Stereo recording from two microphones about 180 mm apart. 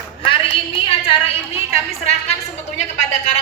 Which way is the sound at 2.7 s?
40° left (ahead or behind).